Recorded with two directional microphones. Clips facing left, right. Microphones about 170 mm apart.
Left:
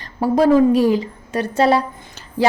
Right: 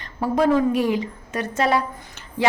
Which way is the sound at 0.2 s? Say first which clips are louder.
Left 5 dB; 35° left (ahead or behind).